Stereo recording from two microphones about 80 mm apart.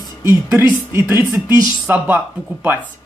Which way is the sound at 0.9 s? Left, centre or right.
Right.